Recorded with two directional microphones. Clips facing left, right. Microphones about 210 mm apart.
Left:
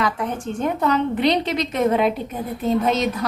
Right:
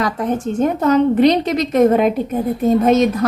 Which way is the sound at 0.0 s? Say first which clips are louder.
Right 5 dB; 40° right (ahead or behind).